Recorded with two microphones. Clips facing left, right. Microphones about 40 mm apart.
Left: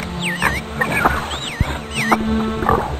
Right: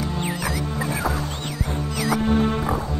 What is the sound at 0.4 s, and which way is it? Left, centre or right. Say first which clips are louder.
Music: left 7 dB; left.